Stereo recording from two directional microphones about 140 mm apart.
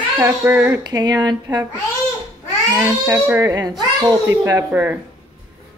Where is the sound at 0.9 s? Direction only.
30° right (ahead or behind).